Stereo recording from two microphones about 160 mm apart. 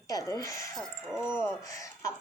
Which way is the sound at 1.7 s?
20° left (ahead or behind).